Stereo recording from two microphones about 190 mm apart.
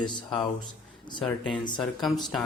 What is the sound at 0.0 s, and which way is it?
Speech, 25° left (ahead or behind).